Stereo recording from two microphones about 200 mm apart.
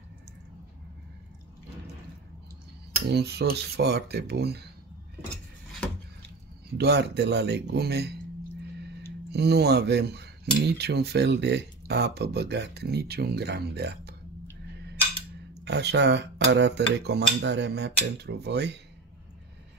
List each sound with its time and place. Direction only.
3.1 s speech: 55° right (ahead or behind)
6.8 s speech: 55° right (ahead or behind)
9.3 s speech: 55° right (ahead or behind)
15.6 s speech: 60° right (ahead or behind)